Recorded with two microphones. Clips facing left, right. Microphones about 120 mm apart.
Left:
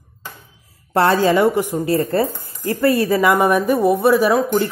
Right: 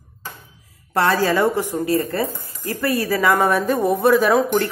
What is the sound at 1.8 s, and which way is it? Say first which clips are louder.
Speech: left 3 dB; 25° left (ahead or behind).